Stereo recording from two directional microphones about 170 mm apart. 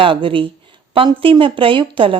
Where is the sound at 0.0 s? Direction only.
30° right (ahead or behind).